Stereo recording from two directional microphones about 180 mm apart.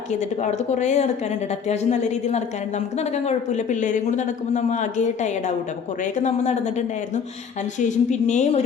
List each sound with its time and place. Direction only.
0.1 s a woman's voice: 40° left (ahead or behind)